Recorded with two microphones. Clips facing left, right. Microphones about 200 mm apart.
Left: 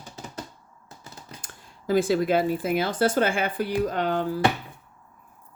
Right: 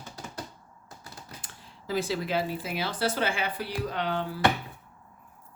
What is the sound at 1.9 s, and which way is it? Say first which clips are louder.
Speech: left 8 dB; 50° left (ahead or behind).